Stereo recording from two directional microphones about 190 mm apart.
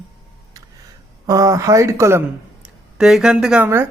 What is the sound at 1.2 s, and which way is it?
Speech, 20° right (ahead or behind).